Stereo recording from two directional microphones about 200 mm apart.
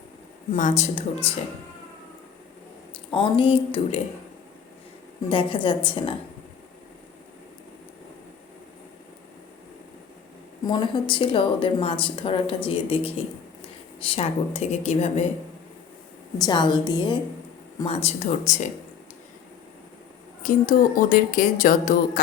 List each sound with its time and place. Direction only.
0.5 s speech: 35° left (ahead or behind)
3.1 s a woman's voice: 25° left (ahead or behind)
5.3 s a woman's voice: 25° left (ahead or behind)
10.7 s a woman's voice: 25° left (ahead or behind)
16.4 s a woman's voice: 20° left (ahead or behind); by 18.7 s 35° left (ahead or behind)
20.4 s speech: 45° left (ahead or behind)